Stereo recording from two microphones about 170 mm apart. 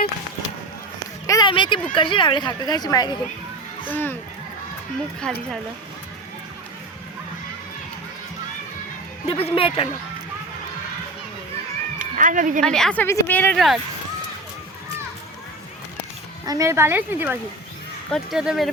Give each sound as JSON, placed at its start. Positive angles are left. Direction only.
{"t": 1.3, "sound": "a sound", "side_deg": 25}
{"t": 2.0, "sound": "speech", "side_deg": 30}
{"t": 3.8, "sound": "speech", "side_deg": 10}
{"t": 5.2, "sound": "speech", "side_deg": 5}
{"t": 9.2, "sound": "speech", "side_deg": 35}
{"t": 11.9, "sound": "speech", "side_deg": -50}
{"t": 12.6, "sound": "speech", "side_deg": 5}
{"t": 16.5, "sound": "a woman's voice", "side_deg": -20}